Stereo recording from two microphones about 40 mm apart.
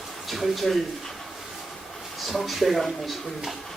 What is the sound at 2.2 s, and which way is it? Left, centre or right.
Speech, centre.